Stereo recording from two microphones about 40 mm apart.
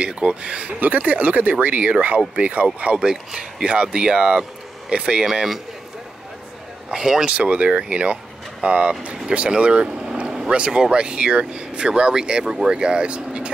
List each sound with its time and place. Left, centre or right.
0.0 s speech: right
0.7 s speech: right
3.0 s speech: right
5.2 s speech: centre
6.9 s speech: centre
7.2 s speech: right